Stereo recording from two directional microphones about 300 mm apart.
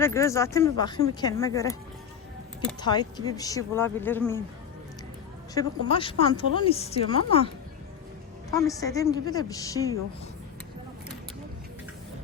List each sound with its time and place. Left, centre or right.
0.0 s a woman's voice: centre
2.8 s a woman's voice: centre
5.5 s a woman's voice: centre